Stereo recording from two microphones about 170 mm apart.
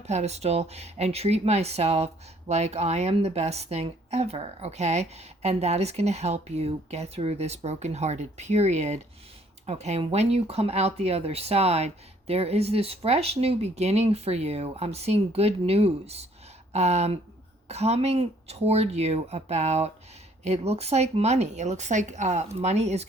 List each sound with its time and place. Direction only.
0.1 s speech: 40° right (ahead or behind)